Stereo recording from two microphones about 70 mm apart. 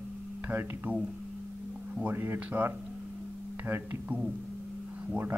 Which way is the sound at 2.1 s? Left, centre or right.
Right.